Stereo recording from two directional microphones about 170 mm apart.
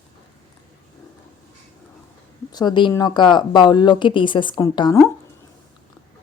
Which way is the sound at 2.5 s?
25° left (ahead or behind).